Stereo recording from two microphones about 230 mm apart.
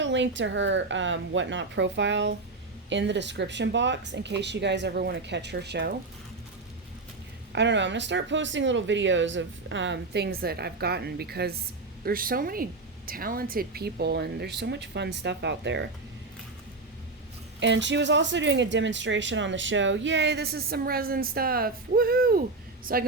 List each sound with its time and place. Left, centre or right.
0.0 s speech: right
7.5 s a woman's voice: right
17.6 s a woman's voice: right